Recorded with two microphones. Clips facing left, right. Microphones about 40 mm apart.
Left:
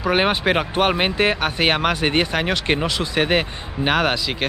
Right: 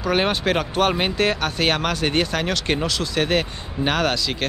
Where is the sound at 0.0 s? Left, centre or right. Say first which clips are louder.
Left 2 dB; centre.